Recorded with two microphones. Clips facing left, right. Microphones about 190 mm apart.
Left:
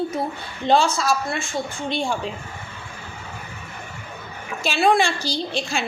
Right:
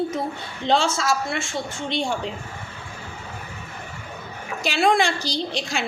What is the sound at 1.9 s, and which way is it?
Speech, 20° right (ahead or behind).